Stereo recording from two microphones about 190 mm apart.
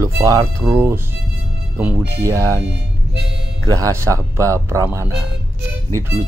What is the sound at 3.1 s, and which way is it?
Speech, 60° right (ahead or behind).